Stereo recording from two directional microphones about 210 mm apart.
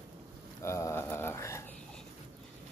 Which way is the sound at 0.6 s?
15° left (ahead or behind).